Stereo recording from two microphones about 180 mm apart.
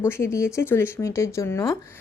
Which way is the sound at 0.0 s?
15° left (ahead or behind).